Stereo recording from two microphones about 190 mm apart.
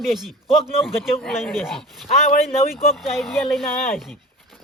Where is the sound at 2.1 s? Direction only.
35° left (ahead or behind).